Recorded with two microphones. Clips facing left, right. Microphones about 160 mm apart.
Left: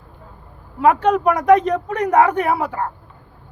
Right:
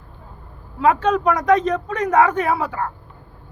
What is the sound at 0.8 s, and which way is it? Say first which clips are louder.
A man's voice: left 2 dB; 15° left (ahead or behind).